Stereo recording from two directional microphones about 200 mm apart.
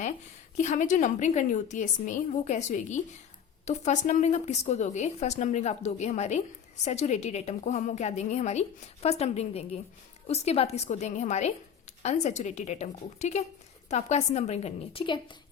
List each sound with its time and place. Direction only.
0.5 s a woman's voice: 35° left (ahead or behind)